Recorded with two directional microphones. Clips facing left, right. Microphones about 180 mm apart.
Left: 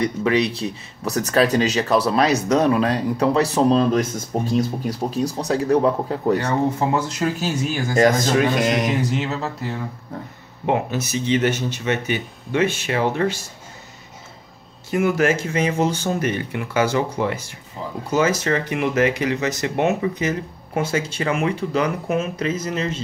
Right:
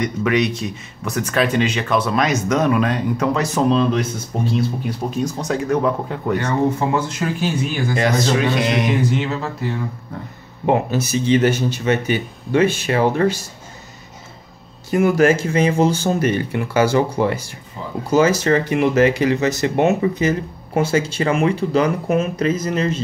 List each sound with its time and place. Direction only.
0.0 s speech: 30° left (ahead or behind)
10.7 s speech: 35° right (ahead or behind)
14.9 s speech: 40° right (ahead or behind)